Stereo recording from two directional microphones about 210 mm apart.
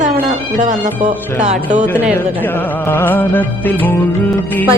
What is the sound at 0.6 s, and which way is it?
Speech, 35° right (ahead or behind).